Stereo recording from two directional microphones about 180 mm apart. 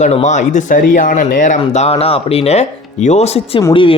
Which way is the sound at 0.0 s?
40° left (ahead or behind).